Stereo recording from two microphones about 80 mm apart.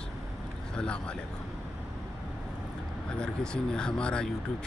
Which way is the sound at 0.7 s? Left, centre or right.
Centre.